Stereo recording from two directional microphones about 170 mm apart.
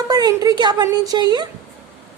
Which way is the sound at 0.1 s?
25° right (ahead or behind).